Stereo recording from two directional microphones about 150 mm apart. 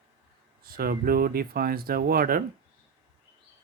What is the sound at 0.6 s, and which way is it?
Speech, 80° right.